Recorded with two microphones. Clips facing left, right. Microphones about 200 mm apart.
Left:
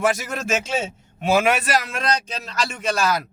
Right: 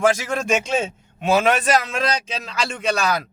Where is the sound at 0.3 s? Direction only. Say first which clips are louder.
Right 3 dB; 5° left (ahead or behind).